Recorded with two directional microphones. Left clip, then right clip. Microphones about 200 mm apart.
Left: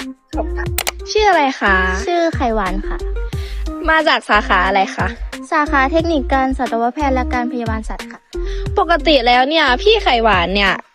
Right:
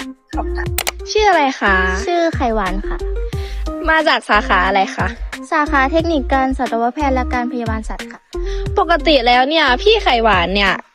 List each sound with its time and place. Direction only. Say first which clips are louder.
0.6 s music: even; centre (ahead or behind)
3.8 s a woman's voice: even; 10° right (ahead or behind)
9.0 s a woman's voice: even; 10° right (ahead or behind)